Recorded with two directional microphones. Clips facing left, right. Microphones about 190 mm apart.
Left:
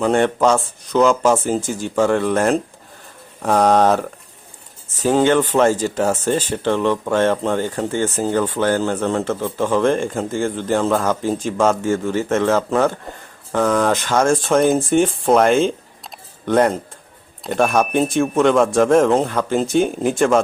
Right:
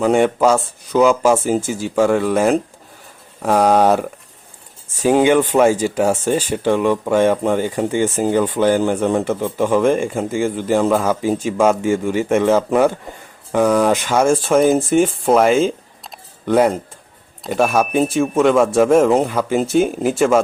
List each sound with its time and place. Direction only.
0.0 s speech: 10° right (ahead or behind)